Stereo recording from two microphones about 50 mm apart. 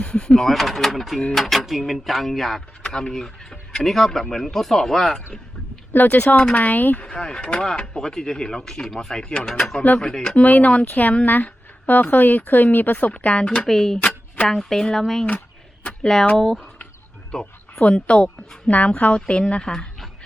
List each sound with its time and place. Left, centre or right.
0.0 s a sound: centre
0.4 s speech: centre
5.9 s a woman's voice: left
7.0 s speech: centre
10.4 s a woman's voice: left
13.7 s speech: centre
17.4 s a woman's voice: left